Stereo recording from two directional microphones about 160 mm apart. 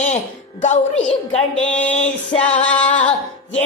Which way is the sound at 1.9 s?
45° left (ahead or behind).